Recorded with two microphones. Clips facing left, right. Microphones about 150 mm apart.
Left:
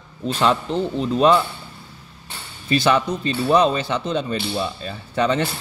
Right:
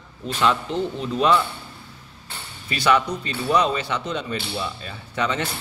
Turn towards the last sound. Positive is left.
turn(degrees=35)  # may be behind; listen again after turning